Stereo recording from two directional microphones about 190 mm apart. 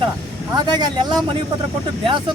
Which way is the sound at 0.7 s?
20° right (ahead or behind).